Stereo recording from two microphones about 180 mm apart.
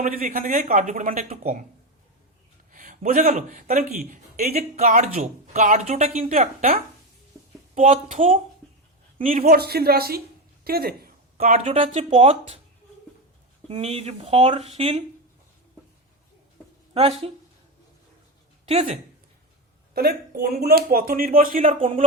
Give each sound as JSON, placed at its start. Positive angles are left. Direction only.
{"t": 0.0, "sound": "speech", "side_deg": -50}
{"t": 2.7, "sound": "speech", "side_deg": -45}
{"t": 9.4, "sound": "speech", "side_deg": -60}
{"t": 10.6, "sound": "a sound", "side_deg": -60}
{"t": 11.5, "sound": "speech", "side_deg": -35}
{"t": 13.7, "sound": "speech", "side_deg": -35}
{"t": 16.9, "sound": "speech", "side_deg": -30}
{"t": 18.7, "sound": "speech", "side_deg": -35}
{"t": 19.9, "sound": "speech", "side_deg": -60}
{"t": 21.6, "sound": "speech", "side_deg": -30}